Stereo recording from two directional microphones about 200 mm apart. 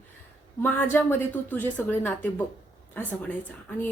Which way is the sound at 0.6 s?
10° left (ahead or behind).